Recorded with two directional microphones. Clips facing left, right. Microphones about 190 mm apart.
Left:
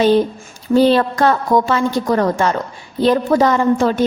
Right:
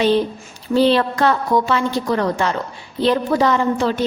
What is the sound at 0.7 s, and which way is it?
A woman's voice, 45° left (ahead or behind).